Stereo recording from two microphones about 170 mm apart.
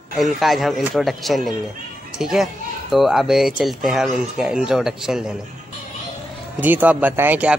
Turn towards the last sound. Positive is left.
turn(degrees=-10)  # may be behind; listen again after turning